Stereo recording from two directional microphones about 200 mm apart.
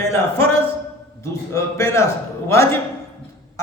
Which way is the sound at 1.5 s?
15° left (ahead or behind).